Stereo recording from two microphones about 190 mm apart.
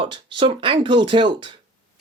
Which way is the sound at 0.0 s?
25° right (ahead or behind).